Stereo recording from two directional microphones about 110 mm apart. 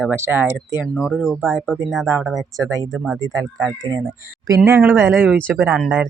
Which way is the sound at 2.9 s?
5° right (ahead or behind).